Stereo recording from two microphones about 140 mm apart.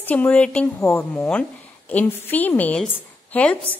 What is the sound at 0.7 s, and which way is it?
Speech, 20° left (ahead or behind).